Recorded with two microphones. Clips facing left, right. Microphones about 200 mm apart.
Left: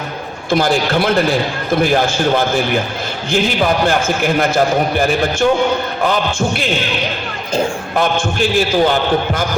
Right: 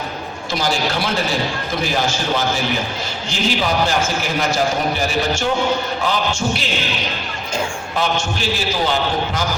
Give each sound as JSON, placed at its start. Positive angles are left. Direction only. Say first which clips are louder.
{"t": 0.5, "sound": "a man's voice", "louder": "left 7 dB", "side_deg": 55}
{"t": 7.9, "sound": "a man's voice", "louder": "left 5 dB", "side_deg": 55}